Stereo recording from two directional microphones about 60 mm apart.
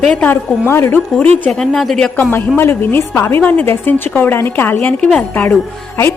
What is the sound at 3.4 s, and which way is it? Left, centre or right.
A woman's voice, left.